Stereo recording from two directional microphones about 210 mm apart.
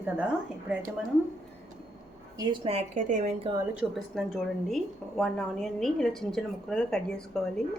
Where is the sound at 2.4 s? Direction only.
25° right (ahead or behind).